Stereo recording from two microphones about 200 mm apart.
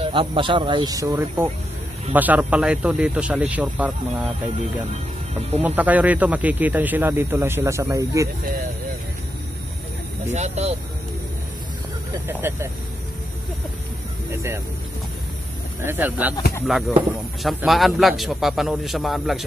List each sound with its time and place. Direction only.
0.0 s speech: 25° right (ahead or behind); by 3.9 s 5° right (ahead or behind)
5.3 s speech: 30° right (ahead or behind)
5.6 s speech: 10° right (ahead or behind)
10.3 s speech: 35° right (ahead or behind)
12.3 s speech: 10° right (ahead or behind)
14.3 s speech: 10° right (ahead or behind)
15.8 s a man's voice: 10° right (ahead or behind)